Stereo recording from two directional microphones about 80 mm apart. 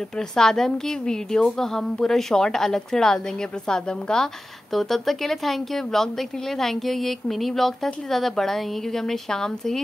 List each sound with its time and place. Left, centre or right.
0.2 s speech: centre